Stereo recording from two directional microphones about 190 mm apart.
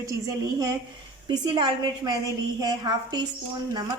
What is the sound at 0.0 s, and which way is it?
A woman's voice, 20° right (ahead or behind).